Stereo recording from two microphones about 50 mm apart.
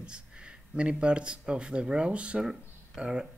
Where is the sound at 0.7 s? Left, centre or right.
Right.